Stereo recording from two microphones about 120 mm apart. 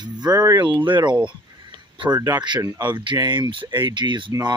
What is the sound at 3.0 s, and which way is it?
Speech, 40° right (ahead or behind).